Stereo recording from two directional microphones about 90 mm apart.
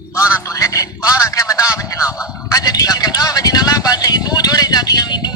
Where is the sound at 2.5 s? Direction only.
45° left (ahead or behind).